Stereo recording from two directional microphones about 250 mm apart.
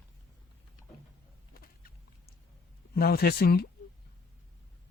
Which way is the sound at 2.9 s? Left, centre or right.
Left.